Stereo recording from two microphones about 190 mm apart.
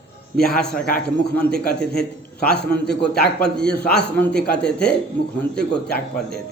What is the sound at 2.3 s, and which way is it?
Speech, 60° left (ahead or behind).